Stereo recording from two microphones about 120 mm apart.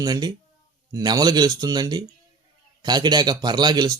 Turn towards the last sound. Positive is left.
turn(degrees=-35)  # may be behind; listen again after turning